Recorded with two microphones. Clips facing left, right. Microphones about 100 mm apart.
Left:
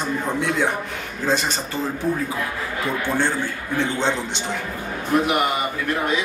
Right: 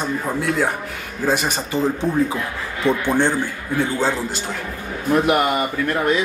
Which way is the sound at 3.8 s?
5° right (ahead or behind).